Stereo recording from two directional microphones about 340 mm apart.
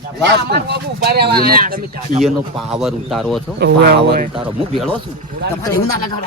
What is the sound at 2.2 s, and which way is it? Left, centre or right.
Speech, centre.